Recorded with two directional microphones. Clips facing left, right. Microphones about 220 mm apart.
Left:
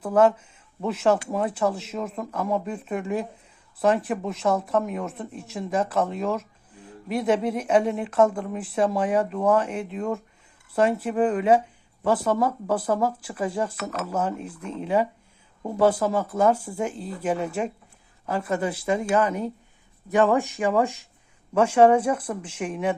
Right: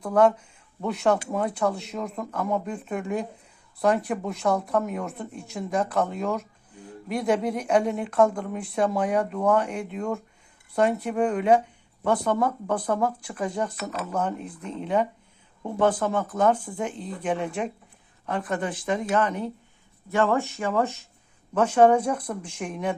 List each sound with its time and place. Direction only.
0.0 s speech: 5° left (ahead or behind)